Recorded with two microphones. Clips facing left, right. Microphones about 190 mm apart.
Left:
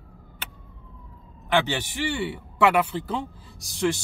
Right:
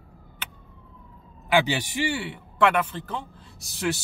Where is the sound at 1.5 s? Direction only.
10° right (ahead or behind).